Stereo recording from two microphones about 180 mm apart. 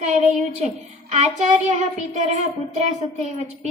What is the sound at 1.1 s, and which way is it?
A woman's voice, 40° right (ahead or behind).